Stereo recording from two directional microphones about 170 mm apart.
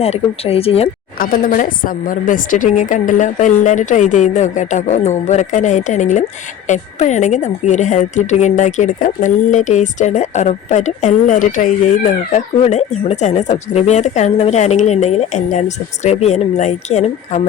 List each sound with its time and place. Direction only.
0.0 s speech: 35° left (ahead or behind)
1.2 s a woman's voice: 50° left (ahead or behind)